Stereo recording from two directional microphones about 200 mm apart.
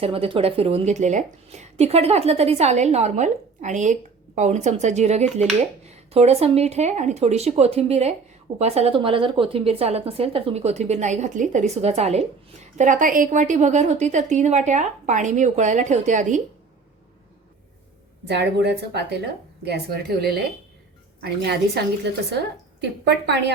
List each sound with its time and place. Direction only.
0.0 s a woman's voice: 30° right (ahead or behind)
18.3 s a woman's voice: 55° right (ahead or behind)